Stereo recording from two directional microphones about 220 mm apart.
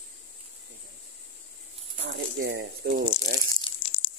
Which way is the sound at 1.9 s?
50° right (ahead or behind).